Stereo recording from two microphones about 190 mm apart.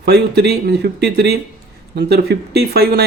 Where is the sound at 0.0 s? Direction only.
55° right (ahead or behind).